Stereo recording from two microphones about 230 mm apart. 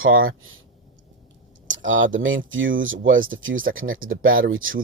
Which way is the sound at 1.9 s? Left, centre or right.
Right.